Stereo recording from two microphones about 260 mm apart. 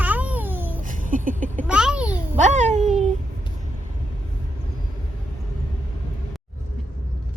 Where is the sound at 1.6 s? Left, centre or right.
Centre.